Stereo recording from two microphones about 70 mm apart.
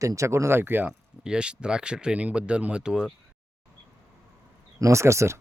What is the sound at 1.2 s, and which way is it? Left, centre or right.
Speech, centre.